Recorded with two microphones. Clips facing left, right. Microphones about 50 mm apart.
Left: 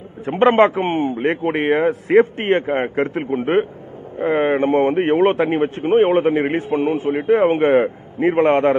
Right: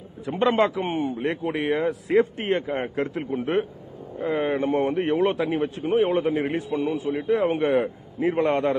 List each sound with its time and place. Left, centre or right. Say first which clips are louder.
0.2 s a man's voice: left 8 dB; left